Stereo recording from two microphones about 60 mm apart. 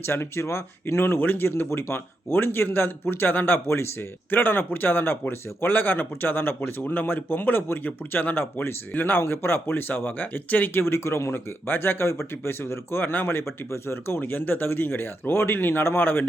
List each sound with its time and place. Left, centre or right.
0.0 s speech: left
10.8 s speech: left